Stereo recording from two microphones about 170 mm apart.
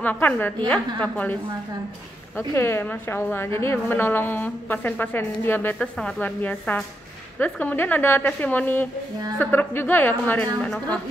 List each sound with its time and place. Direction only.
0.0 s a woman's voice: 10° left (ahead or behind)